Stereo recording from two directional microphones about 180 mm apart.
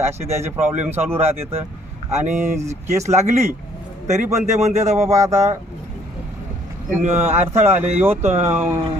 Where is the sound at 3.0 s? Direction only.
40° right (ahead or behind).